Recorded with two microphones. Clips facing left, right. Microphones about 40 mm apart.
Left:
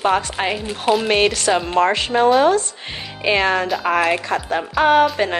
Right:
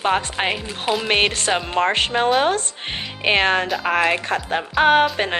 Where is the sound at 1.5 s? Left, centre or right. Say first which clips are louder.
Left 3 dB; centre.